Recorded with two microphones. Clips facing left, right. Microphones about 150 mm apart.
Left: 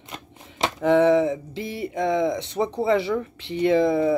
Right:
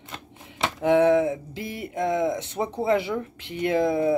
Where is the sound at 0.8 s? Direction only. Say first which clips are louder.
Left 1 dB; 10° right (ahead or behind).